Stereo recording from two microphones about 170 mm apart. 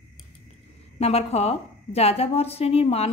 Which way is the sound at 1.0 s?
35° left (ahead or behind).